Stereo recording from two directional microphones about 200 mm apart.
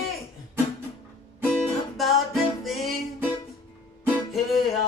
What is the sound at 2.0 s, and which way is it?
Music, centre (ahead or behind).